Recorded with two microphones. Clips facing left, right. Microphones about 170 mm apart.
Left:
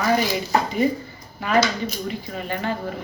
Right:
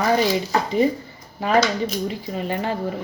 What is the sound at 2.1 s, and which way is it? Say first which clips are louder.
Speech: right 2 dB; 30° right (ahead or behind).